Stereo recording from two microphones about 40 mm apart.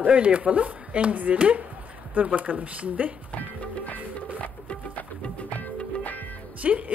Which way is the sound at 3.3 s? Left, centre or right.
Left.